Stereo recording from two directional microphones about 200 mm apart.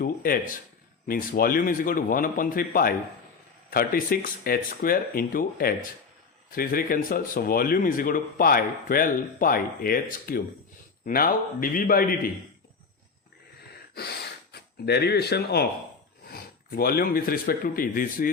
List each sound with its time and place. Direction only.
0.0 s speech: 45° left (ahead or behind)
13.9 s speech: 50° left (ahead or behind)